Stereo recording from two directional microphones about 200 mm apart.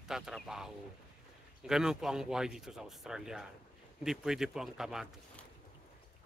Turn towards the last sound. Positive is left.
turn(degrees=0)  # may be behind; listen again after turning